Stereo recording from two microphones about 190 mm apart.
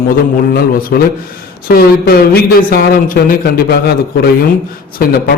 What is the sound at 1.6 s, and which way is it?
A man's voice, 55° left (ahead or behind).